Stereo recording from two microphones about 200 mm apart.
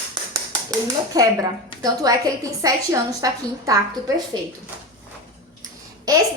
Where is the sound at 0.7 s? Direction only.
20° right (ahead or behind).